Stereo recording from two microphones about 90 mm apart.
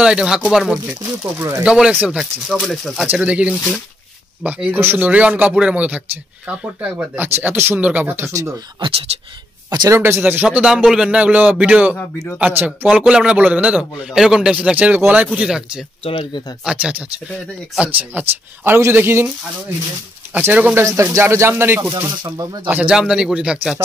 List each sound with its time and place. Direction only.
0.0 s a man's voice: 10° right (ahead or behind)
1.0 s speech: 35° right (ahead or behind)
1.6 s a man's voice: 10° right (ahead or behind)
3.2 s a man's voice: 15° right (ahead or behind)
7.3 s speech: 30° right (ahead or behind)
8.3 s speech: 35° right (ahead or behind)
9.7 s a man's voice: 45° right (ahead or behind)
9.9 s a man's voice: 25° right (ahead or behind); by 15.8 s 10° right (ahead or behind)
16.0 s speech: 90° left
16.6 s a man's voice: 15° right (ahead or behind)
20.4 s speech: 20° right (ahead or behind)
20.8 s speech: 35° right (ahead or behind); by 22.9 s 20° right (ahead or behind)
22.9 s a man's voice: 10° right (ahead or behind)